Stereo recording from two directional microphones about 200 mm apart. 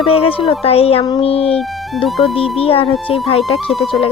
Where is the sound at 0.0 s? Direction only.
30° left (ahead or behind).